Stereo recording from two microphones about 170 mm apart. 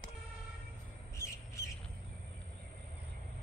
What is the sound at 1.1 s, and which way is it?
Squawk, 15° left (ahead or behind).